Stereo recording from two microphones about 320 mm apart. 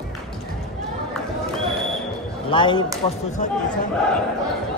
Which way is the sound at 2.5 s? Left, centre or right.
Centre.